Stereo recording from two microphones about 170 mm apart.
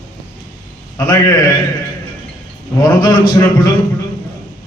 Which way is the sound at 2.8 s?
25° left (ahead or behind).